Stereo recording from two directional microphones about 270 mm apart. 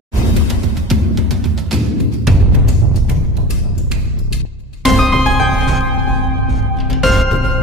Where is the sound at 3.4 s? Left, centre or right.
Centre.